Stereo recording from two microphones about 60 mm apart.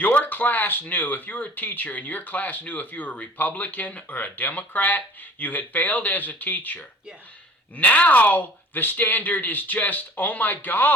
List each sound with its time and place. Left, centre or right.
0.0 s speech: left